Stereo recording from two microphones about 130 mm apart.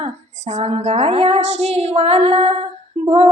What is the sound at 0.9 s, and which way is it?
Speech, 55° right (ahead or behind).